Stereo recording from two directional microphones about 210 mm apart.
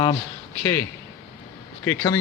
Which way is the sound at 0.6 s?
15° left (ahead or behind).